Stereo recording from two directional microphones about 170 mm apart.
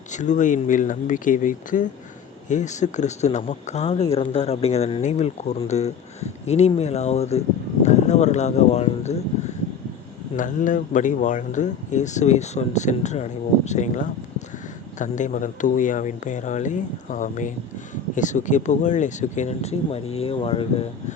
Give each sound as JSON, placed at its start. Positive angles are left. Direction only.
{"t": 0.1, "sound": "speech", "side_deg": 45}
{"t": 10.3, "sound": "speech", "side_deg": 50}